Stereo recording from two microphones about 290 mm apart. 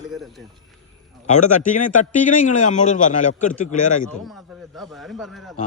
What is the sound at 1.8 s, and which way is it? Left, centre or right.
A man's voice, left.